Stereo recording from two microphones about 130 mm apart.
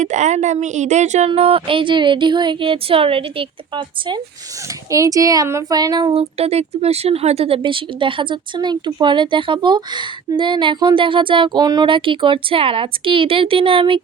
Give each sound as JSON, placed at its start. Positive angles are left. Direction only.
{"t": 0.0, "sound": "a woman's voice", "side_deg": -70}
{"t": 1.3, "sound": "speech", "side_deg": -45}
{"t": 4.9, "sound": "speech", "side_deg": -25}
{"t": 6.1, "sound": "speech", "side_deg": -50}